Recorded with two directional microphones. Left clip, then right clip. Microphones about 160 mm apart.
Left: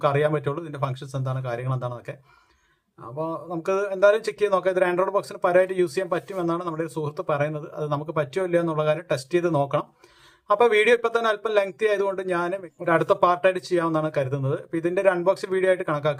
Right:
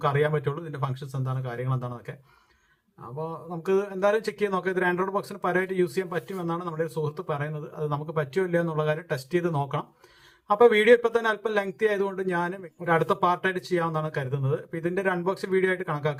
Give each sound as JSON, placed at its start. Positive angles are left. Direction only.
{"t": 0.0, "sound": "speech", "side_deg": 40}
{"t": 3.2, "sound": "speech", "side_deg": 40}